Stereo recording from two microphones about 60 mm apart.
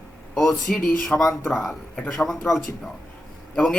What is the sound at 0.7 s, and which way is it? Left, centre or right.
Music, centre.